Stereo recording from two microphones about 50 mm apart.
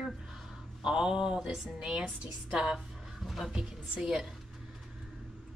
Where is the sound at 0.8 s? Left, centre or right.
Centre.